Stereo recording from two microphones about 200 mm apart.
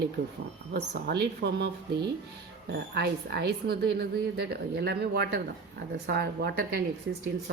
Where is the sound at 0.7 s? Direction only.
55° right (ahead or behind).